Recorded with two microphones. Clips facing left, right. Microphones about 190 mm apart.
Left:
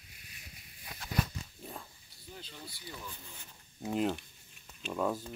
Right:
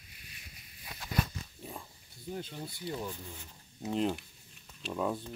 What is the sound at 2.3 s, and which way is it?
Speech, 50° right (ahead or behind).